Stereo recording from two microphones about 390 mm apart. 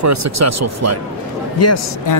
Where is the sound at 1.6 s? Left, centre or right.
Left.